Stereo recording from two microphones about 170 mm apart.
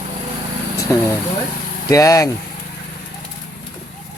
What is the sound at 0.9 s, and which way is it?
Speech, 15° left (ahead or behind).